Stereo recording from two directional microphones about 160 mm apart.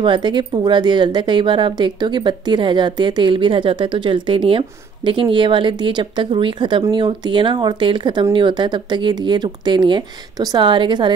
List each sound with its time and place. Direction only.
0.0 s speech: 30° right (ahead or behind)